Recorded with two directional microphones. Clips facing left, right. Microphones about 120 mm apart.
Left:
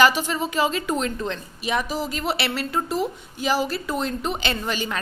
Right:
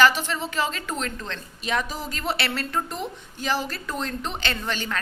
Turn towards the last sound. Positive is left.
turn(degrees=10)  # may be behind; listen again after turning